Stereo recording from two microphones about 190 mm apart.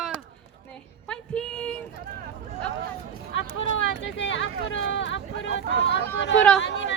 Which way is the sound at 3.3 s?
80° left.